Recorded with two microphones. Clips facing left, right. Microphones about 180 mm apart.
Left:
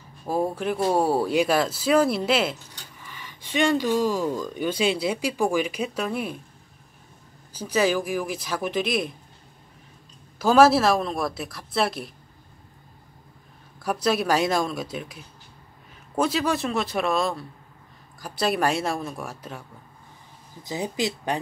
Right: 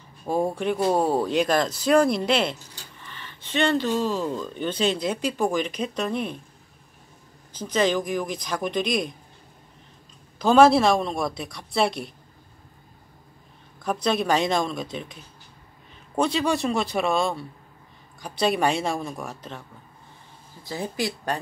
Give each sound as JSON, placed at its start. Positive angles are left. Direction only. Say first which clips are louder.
{"t": 0.2, "sound": "speech", "louder": "right 1 dB", "side_deg": 5}
{"t": 7.5, "sound": "speech", "louder": "even", "side_deg": 10}
{"t": 10.4, "sound": "speech", "louder": "right 1 dB", "side_deg": 5}
{"t": 13.7, "sound": "speech", "louder": "even", "side_deg": 5}
{"t": 20.6, "sound": "speech", "louder": "left 1 dB", "side_deg": 20}